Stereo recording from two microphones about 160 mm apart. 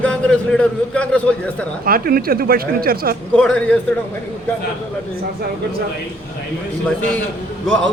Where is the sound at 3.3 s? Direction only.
5° left (ahead or behind).